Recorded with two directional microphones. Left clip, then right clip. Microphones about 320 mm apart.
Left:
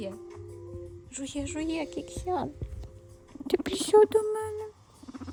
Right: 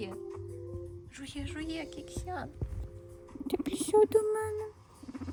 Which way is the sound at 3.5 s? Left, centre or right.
Left.